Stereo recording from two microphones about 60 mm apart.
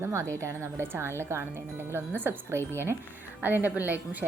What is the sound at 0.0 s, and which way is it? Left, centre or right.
A woman's voice, right.